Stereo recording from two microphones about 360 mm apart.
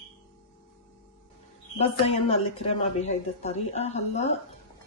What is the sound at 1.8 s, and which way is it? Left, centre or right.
Speech, centre.